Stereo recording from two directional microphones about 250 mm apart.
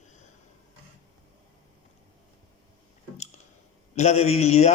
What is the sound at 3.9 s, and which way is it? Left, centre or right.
Speech, left.